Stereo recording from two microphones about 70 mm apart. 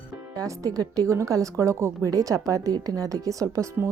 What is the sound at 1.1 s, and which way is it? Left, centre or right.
A woman's voice, right.